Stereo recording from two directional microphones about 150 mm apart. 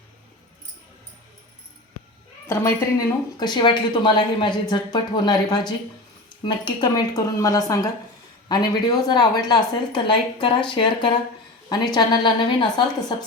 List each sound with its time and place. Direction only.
3.3 s a woman's voice: 30° left (ahead or behind)